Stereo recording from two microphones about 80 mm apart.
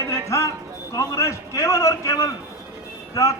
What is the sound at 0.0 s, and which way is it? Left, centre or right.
Music, left.